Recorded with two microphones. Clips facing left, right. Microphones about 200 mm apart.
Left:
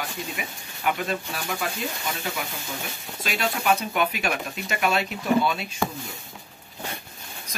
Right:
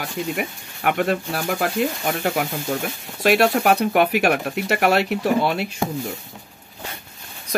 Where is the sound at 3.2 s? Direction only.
70° right (ahead or behind).